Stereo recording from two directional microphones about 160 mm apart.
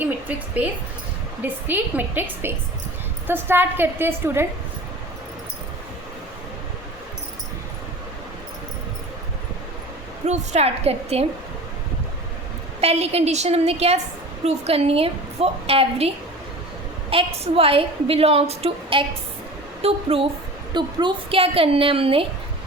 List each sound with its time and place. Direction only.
0.0 s a woman's voice: 10° right (ahead or behind)
10.2 s a woman's voice: 45° right (ahead or behind)
12.8 s a woman's voice: 40° right (ahead or behind)